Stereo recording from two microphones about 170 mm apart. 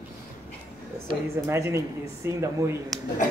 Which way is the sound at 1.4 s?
15° right (ahead or behind).